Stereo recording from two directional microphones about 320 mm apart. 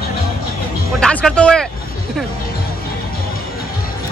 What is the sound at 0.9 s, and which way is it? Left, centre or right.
Speech, centre.